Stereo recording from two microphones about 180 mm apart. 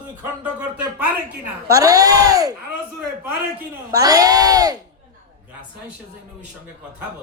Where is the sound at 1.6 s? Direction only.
20° right (ahead or behind).